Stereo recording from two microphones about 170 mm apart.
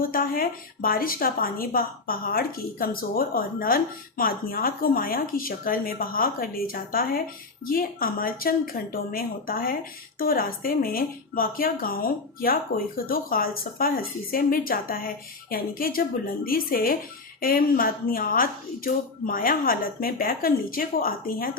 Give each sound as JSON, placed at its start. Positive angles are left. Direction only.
{"t": 0.0, "sound": "speech", "side_deg": 60}